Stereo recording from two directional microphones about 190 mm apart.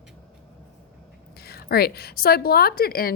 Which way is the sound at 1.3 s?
55° left (ahead or behind).